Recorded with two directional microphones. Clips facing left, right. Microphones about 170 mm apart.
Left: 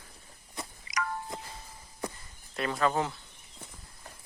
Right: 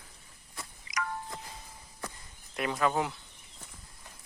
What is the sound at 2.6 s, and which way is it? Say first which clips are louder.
Speech: even; 15° right (ahead or behind).